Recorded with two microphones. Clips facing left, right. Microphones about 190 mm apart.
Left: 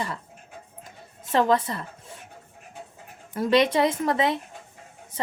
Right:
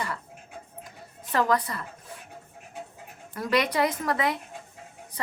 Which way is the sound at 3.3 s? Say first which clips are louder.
Left 5 dB; 25° left (ahead or behind).